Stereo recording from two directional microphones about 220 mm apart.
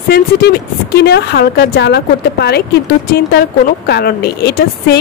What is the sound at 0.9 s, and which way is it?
Speech, 50° left (ahead or behind).